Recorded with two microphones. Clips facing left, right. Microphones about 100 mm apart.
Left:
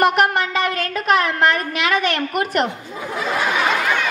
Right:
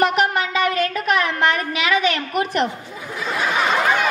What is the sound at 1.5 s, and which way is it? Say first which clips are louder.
Speech: even; 45° left (ahead or behind).